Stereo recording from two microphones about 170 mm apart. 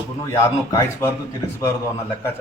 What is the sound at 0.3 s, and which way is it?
Speech, 15° left (ahead or behind).